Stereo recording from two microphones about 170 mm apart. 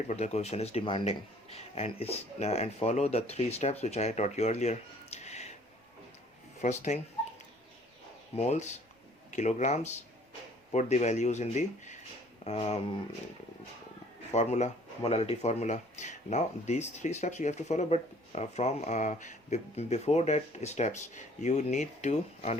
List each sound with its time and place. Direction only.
0.1 s speech: 40° left (ahead or behind)
6.6 s speech: 45° left (ahead or behind)
8.4 s speech: 40° left (ahead or behind)
14.3 s speech: 40° left (ahead or behind)